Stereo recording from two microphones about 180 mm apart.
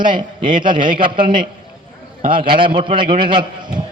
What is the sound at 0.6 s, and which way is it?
Speech, 25° right (ahead or behind).